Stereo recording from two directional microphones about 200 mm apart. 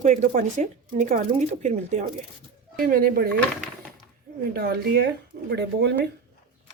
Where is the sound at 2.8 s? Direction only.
45° right (ahead or behind).